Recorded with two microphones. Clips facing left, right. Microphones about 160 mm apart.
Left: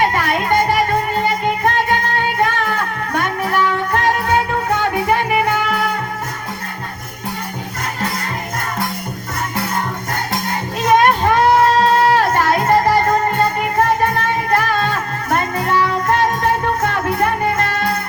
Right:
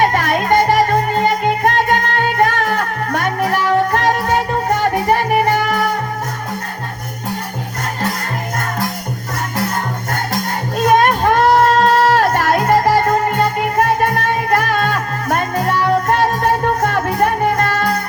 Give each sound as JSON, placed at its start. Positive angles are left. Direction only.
{"t": 0.0, "sound": "music", "side_deg": -45}
{"t": 10.8, "sound": "music", "side_deg": -50}